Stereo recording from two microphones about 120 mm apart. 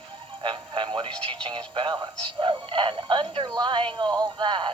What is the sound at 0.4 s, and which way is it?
Speech, 40° right (ahead or behind).